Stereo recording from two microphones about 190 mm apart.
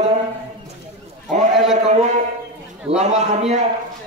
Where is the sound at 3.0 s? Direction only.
35° right (ahead or behind).